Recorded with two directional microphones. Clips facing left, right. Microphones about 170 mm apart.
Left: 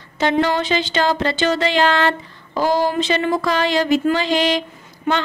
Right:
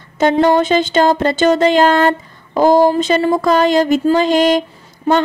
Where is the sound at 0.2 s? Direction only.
45° right (ahead or behind).